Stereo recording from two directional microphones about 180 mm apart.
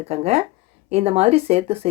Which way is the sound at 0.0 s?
35° right (ahead or behind).